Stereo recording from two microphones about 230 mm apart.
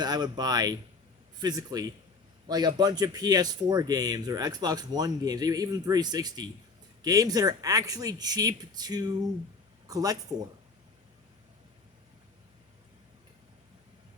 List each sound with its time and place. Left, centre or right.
0.0 s speech: centre